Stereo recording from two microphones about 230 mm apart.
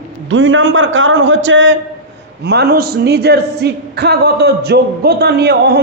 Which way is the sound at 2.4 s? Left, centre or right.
Right.